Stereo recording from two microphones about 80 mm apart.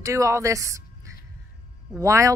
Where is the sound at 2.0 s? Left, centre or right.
Right.